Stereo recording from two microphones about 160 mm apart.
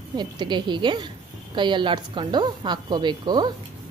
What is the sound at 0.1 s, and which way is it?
A woman's voice, 30° right (ahead or behind).